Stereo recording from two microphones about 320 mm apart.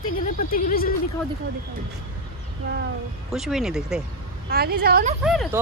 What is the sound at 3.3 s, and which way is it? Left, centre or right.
Speech, centre.